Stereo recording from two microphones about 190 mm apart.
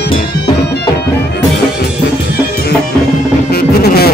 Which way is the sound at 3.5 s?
55° left (ahead or behind).